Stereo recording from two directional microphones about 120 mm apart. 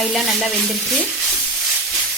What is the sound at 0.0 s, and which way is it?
Speech, centre (ahead or behind).